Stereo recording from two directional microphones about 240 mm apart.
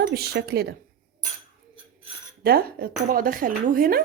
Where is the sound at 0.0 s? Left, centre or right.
Right.